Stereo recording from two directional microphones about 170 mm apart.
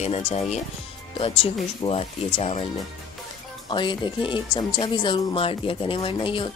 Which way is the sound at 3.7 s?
30° left (ahead or behind).